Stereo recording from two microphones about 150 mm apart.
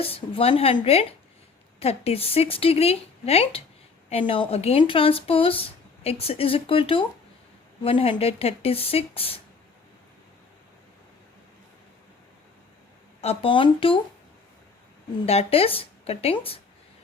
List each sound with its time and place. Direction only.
0.0 s speech: 40° left (ahead or behind)
13.2 s speech: 35° left (ahead or behind)
15.3 s speech: 40° left (ahead or behind)